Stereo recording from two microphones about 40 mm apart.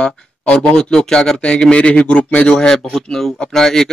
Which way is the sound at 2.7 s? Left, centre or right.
Centre.